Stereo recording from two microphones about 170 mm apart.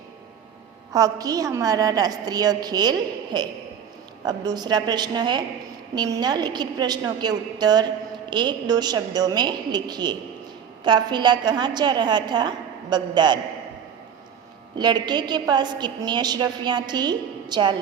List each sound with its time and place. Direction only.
0.9 s a woman's voice: 20° right (ahead or behind)
4.3 s a woman's voice: 25° right (ahead or behind)
14.8 s a woman's voice: 25° right (ahead or behind)